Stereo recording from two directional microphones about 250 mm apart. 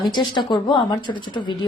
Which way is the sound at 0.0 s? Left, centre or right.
Centre.